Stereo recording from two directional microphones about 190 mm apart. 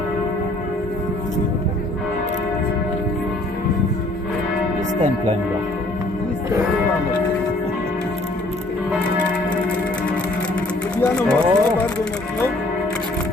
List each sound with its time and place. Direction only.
10.9 s speech: 5° left (ahead or behind)